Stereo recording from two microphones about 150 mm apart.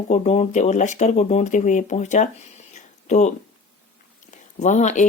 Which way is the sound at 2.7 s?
55° left (ahead or behind).